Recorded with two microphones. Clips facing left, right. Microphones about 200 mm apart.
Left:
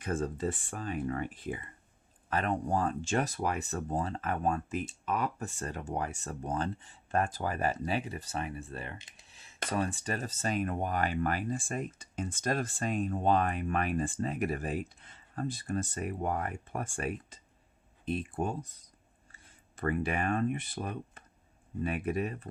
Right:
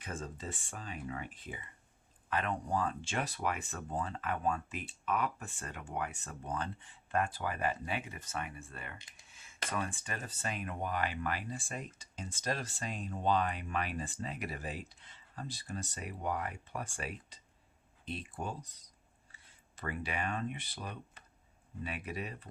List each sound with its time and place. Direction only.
0.0 s speech: 55° left (ahead or behind)